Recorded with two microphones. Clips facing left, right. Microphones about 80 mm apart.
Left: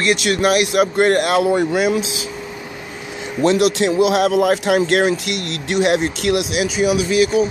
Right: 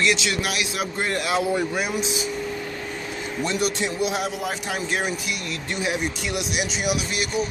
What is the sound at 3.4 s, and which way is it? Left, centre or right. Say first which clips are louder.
A man's voice: left 10 dB; left.